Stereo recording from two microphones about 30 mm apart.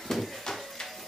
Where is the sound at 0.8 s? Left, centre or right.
Centre.